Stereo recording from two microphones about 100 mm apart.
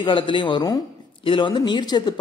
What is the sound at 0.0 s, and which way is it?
A man's voice, 55° left (ahead or behind).